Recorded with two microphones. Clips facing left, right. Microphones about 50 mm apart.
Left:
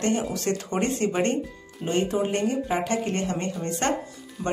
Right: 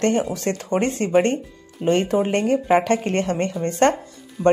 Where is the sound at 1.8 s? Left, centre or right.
Right.